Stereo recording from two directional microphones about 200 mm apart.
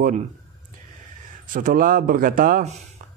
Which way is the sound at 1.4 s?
40° right (ahead or behind).